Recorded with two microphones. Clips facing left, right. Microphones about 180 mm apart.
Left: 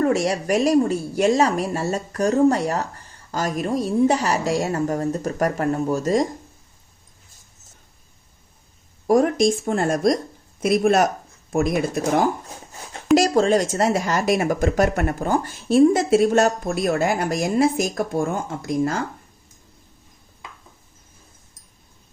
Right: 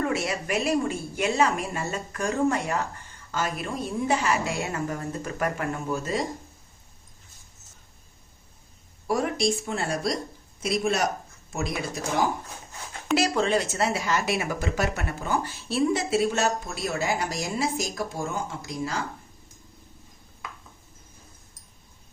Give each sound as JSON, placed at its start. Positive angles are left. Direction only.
{"t": 0.0, "sound": "a woman's voice", "side_deg": 40}
{"t": 9.0, "sound": "a woman's voice", "side_deg": 45}
{"t": 13.1, "sound": "a woman's voice", "side_deg": 40}